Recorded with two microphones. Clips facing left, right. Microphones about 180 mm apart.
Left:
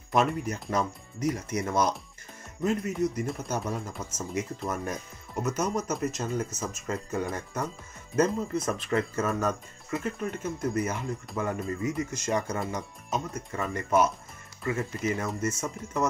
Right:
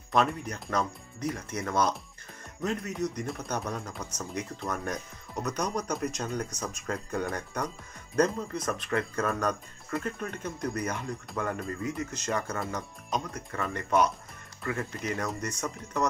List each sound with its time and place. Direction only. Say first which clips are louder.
0.1 s a man's voice: left 1 dB; 5° left (ahead or behind)
8.6 s speech: even; 30° left (ahead or behind)
9.1 s a man's voice: left 1 dB; 5° left (ahead or behind)